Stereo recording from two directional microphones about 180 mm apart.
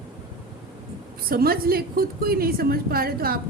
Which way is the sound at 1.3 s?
55° right (ahead or behind).